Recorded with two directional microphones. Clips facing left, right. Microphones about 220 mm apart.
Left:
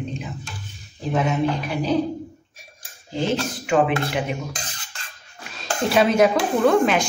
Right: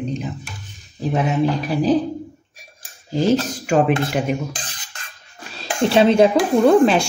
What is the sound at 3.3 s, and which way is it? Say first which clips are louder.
Speech: right 3 dB; 40° right (ahead or behind).